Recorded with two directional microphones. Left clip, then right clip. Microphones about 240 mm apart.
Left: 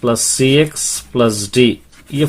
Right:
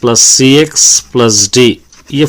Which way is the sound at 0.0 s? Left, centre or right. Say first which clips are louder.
Right 8 dB; right.